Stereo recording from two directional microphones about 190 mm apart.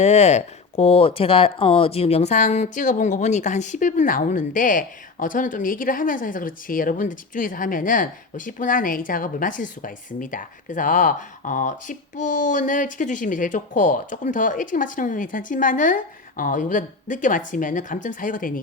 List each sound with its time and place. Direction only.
0.0 s speech: 35° left (ahead or behind)